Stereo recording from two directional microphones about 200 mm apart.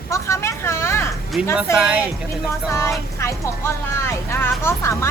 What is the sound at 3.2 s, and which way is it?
Speech, 15° left (ahead or behind).